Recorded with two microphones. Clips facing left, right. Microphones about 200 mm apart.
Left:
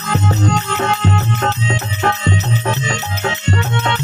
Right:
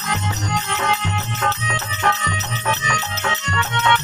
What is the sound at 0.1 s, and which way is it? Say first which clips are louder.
Music: left 8 dB; 55° left (ahead or behind).